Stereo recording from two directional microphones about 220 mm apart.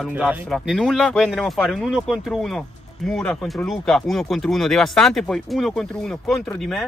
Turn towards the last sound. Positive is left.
turn(degrees=5)  # may be behind; listen again after turning